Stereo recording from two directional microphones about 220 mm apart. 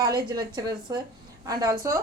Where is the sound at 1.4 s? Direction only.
15° right (ahead or behind).